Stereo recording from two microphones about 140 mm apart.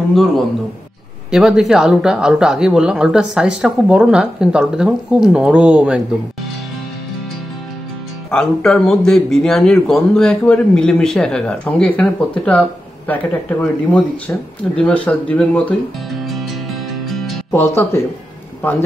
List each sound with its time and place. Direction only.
1.3 s a man's voice: 5° right (ahead or behind)
8.3 s a man's voice: 5° left (ahead or behind)
16.9 s music: centre (ahead or behind)
17.5 s a man's voice: 15° left (ahead or behind)